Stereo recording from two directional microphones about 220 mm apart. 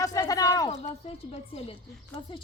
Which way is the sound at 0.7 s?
25° left (ahead or behind).